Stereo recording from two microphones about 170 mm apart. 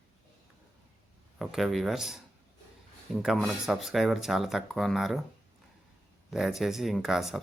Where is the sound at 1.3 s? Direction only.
Centre (ahead or behind).